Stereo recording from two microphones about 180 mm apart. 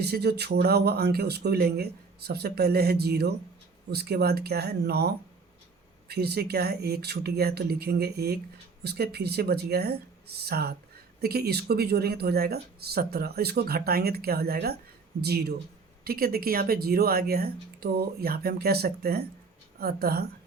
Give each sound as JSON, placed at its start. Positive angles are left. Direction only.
{"t": 0.0, "sound": "speech", "side_deg": -65}